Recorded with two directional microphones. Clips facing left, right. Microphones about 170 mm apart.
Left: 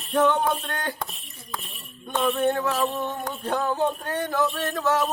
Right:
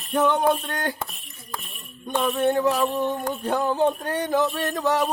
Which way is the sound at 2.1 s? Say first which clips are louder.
Right 1 dB; 10° right (ahead or behind).